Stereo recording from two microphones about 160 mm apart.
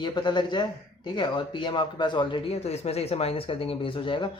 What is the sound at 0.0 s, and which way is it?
Speech, 30° left (ahead or behind).